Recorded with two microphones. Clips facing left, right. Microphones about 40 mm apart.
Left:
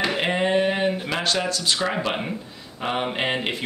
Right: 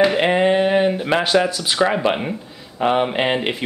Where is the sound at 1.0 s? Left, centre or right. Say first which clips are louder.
Right 7 dB; centre.